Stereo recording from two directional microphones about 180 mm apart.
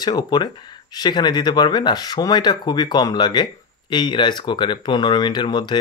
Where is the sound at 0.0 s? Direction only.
25° left (ahead or behind).